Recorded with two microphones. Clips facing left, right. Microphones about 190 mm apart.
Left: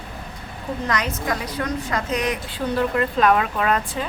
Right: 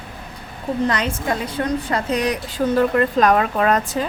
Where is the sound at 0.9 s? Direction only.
30° right (ahead or behind).